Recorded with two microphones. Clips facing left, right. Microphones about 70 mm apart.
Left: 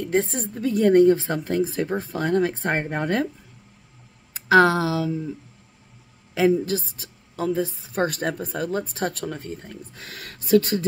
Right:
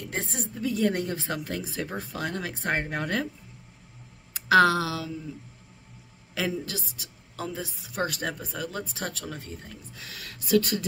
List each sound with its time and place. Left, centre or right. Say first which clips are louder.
0.0 s speech: left 10 dB; left
4.3 s speech: left 3 dB; left
6.6 s speech: left 10 dB; left